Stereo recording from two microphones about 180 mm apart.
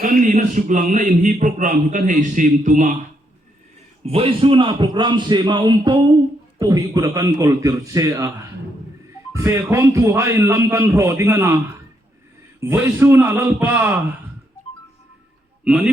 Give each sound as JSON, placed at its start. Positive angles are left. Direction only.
{"t": 0.0, "sound": "a man's voice", "side_deg": -50}
{"t": 4.0, "sound": "a man's voice", "side_deg": -35}
{"t": 9.3, "sound": "a man's voice", "side_deg": -15}
{"t": 15.6, "sound": "a man's voice", "side_deg": -5}